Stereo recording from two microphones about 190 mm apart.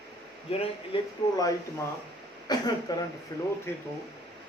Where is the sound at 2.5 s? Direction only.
20° left (ahead or behind).